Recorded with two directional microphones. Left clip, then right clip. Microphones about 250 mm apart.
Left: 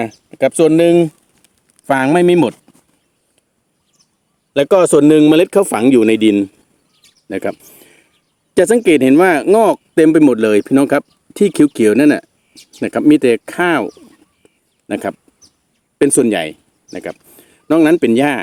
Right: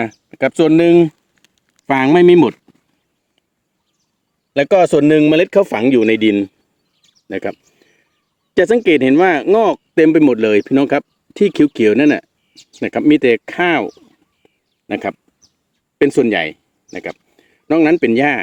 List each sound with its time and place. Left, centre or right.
0.0 s speech: centre
4.5 s speech: centre
7.0 s bird: centre
7.6 s a sound: left
8.5 s speech: left
14.4 s a sound: centre
16.0 s speech: centre